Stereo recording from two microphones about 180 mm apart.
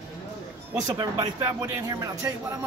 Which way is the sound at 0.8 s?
20° right (ahead or behind).